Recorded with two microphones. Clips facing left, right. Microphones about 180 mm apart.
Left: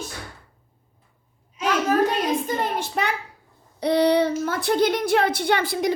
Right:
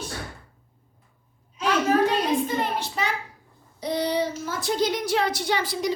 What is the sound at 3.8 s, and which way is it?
A woman's voice, 65° left (ahead or behind).